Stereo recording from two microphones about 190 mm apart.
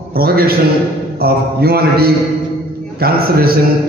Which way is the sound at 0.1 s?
55° right (ahead or behind).